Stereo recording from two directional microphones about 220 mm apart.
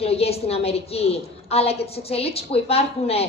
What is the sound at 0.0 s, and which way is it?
A woman's voice, 25° left (ahead or behind).